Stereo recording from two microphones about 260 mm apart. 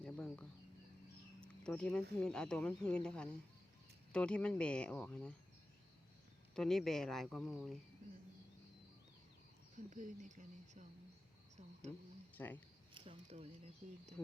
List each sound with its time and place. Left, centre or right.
0.0 s a sound: centre
1.5 s speech: centre
6.6 s speech: centre
9.7 s speech: right
12.3 s speech: centre
12.9 s speech: right